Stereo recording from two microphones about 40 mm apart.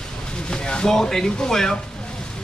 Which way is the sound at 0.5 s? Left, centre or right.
Left.